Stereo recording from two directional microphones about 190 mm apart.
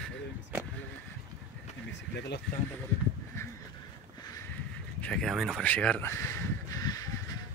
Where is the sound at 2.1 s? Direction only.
60° left (ahead or behind).